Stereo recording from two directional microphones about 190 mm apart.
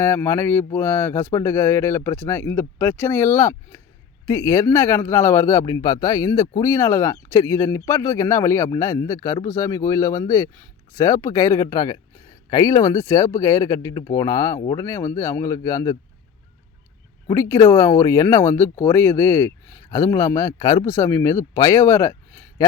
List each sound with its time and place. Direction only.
0.0 s speech: 15° left (ahead or behind)
17.2 s speech: 15° left (ahead or behind)